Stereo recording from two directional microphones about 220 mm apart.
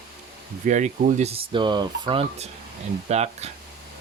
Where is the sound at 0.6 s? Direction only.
35° right (ahead or behind).